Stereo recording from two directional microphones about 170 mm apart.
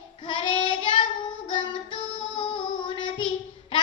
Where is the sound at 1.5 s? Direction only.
30° left (ahead or behind).